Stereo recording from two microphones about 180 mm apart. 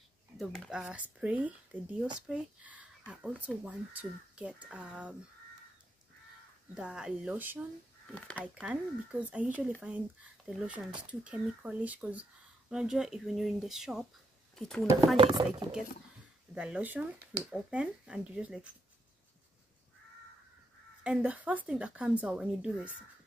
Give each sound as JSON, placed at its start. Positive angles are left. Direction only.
{"t": 0.4, "sound": "speech", "side_deg": 0}
{"t": 6.7, "sound": "speech", "side_deg": -5}
{"t": 8.1, "sound": "speech", "side_deg": 5}
{"t": 8.5, "sound": "speech", "side_deg": -5}
{"t": 15.1, "sound": "speech", "side_deg": -25}
{"t": 16.5, "sound": "speech", "side_deg": -5}
{"t": 21.0, "sound": "speech", "side_deg": -5}